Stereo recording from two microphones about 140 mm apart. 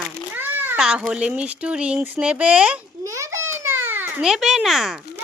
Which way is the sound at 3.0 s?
20° right (ahead or behind).